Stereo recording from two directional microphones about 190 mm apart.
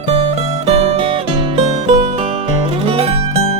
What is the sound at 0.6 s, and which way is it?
Music, 35° right (ahead or behind).